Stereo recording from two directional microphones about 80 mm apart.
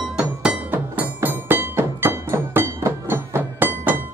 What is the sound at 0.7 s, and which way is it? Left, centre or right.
Music, right.